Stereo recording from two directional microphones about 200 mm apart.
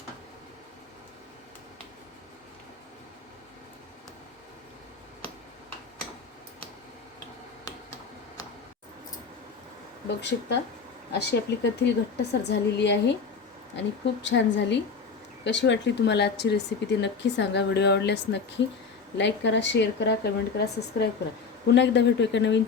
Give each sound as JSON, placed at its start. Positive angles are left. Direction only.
{"t": 10.2, "sound": "a woman's voice", "side_deg": 60}